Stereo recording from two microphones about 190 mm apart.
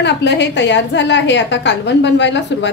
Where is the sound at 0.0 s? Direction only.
65° left (ahead or behind).